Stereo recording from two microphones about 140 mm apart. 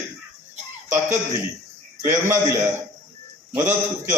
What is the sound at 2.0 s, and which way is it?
Speech, 20° right (ahead or behind).